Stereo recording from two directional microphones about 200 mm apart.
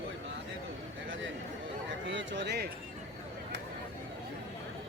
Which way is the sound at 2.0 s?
65° right (ahead or behind).